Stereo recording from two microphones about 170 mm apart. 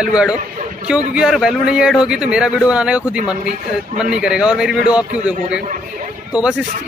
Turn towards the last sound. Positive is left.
turn(degrees=-5)  # may be behind; listen again after turning